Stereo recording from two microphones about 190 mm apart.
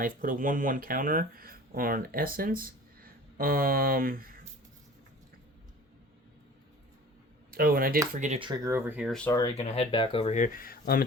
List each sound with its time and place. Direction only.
0.0 s speech: 45° right (ahead or behind)
7.5 s speech: 50° right (ahead or behind)
8.1 s speech: 40° right (ahead or behind)
8.4 s speech: 20° right (ahead or behind)
9.6 s speech: 30° left (ahead or behind); by 11.0 s 50° left (ahead or behind)